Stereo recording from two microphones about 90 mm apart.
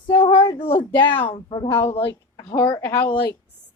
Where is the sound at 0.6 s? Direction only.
90° left.